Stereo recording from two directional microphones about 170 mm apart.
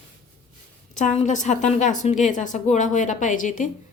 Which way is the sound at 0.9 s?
40° left (ahead or behind).